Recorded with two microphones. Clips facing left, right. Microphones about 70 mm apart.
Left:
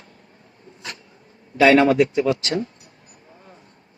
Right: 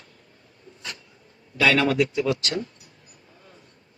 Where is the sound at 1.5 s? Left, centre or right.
Left.